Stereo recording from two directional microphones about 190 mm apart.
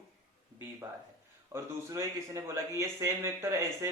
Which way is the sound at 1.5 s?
15° right (ahead or behind).